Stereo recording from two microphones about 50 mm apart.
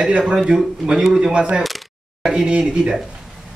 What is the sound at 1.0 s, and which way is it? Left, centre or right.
A man's voice, centre.